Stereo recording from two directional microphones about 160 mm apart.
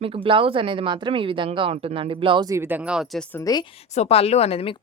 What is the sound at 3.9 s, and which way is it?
Speech, 40° left (ahead or behind).